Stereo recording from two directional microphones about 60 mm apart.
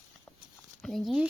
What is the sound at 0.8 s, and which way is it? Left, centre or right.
Speech, centre.